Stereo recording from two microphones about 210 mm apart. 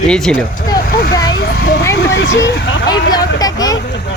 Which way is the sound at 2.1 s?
60° left (ahead or behind).